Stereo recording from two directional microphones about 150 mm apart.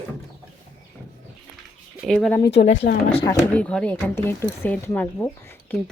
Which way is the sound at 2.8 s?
90° left.